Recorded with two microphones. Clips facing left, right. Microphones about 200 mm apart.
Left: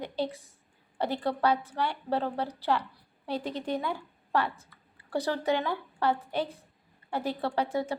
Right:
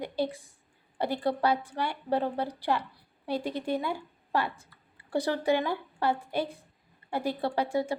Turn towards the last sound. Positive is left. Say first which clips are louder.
# right 1 dB
turn(degrees=-10)  # may be behind; listen again after turning